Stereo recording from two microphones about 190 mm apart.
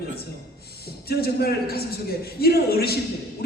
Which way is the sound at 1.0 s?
55° left (ahead or behind).